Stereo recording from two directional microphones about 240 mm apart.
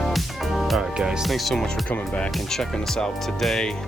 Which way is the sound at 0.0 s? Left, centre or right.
Centre.